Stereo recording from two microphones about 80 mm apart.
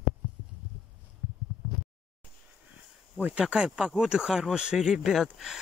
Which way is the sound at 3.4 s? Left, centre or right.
Centre.